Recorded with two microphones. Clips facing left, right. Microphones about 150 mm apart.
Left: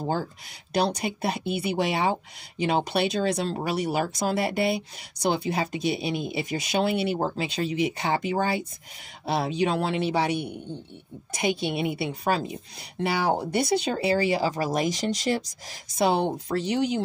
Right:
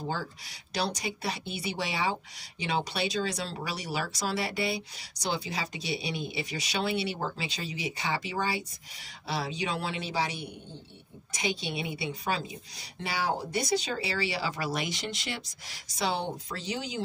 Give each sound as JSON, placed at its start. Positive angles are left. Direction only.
{"t": 0.0, "sound": "speech", "side_deg": 50}
{"t": 13.9, "sound": "speech", "side_deg": 45}